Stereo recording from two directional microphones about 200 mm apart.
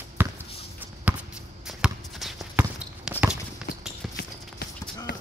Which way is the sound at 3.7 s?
50° left (ahead or behind).